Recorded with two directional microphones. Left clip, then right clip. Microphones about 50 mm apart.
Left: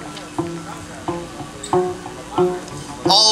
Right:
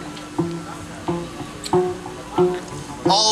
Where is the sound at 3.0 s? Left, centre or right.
Left.